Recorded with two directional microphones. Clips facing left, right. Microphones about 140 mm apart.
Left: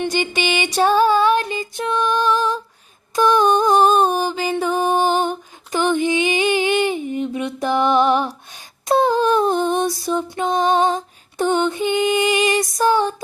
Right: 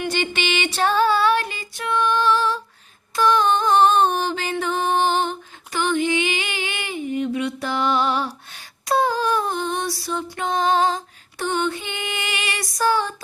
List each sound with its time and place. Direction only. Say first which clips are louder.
0.1 s music: left 3 dB; 15° left (ahead or behind)
8.9 s female singing: left 4 dB; 25° left (ahead or behind)